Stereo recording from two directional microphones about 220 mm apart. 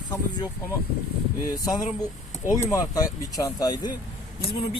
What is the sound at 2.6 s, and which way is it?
Speech, 15° left (ahead or behind).